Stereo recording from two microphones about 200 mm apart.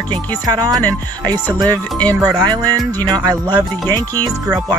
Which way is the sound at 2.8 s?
10° left (ahead or behind).